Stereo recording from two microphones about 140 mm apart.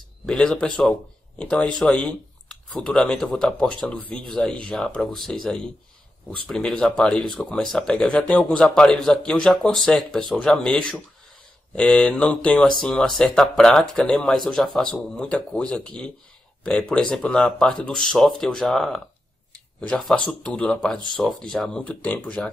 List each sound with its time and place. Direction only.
0.3 s speech: 5° left (ahead or behind)